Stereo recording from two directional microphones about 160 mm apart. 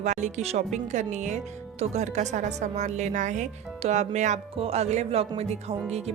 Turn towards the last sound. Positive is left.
turn(degrees=-40)  # may be behind; listen again after turning